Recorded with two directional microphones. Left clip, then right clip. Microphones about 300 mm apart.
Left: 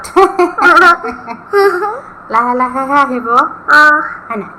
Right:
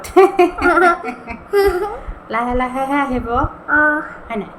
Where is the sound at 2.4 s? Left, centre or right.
Centre.